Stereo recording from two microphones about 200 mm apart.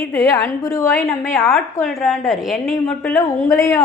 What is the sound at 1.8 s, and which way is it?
A woman's voice, centre (ahead or behind).